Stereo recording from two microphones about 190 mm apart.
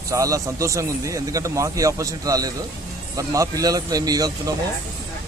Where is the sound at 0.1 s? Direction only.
15° right (ahead or behind).